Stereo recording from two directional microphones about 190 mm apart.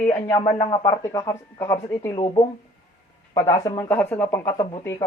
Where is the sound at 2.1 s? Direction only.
25° left (ahead or behind).